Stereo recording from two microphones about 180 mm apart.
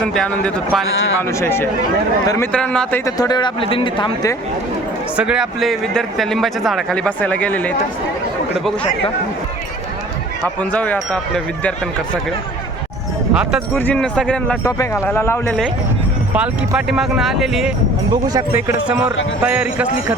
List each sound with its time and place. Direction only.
0.0 s speech: 5° left (ahead or behind)
1.3 s a man's voice: 15° left (ahead or behind)
2.5 s speech: 5° left (ahead or behind)
3.2 s a man's voice: 25° left (ahead or behind)
5.1 s speech: 5° right (ahead or behind)
10.4 s speech: 10° left (ahead or behind)
13.3 s speech: 5° right (ahead or behind)
13.7 s speech: 10° left (ahead or behind)
14.6 s speech: 15° left (ahead or behind)
16.3 s speech: 5° right (ahead or behind)
18.1 s speech: 20° right (ahead or behind)
19.4 s speech: 5° right (ahead or behind)